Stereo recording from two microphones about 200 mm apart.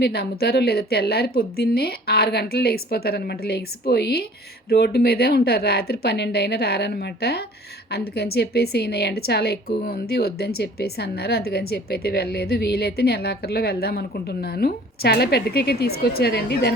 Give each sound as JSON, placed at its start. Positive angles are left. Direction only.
{"t": 0.0, "sound": "a woman's voice", "side_deg": 55}